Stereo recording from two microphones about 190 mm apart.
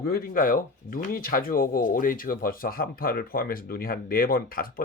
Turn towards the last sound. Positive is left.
turn(degrees=50)  # may be behind; listen again after turning